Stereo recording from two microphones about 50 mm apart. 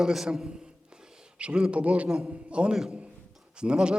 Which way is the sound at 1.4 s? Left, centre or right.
Right.